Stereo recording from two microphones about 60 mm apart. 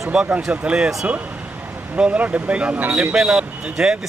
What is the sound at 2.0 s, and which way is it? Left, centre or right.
Speech, right.